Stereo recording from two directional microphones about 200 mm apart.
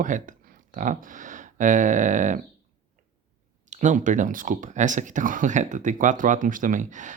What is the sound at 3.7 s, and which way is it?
Speech, 40° right (ahead or behind).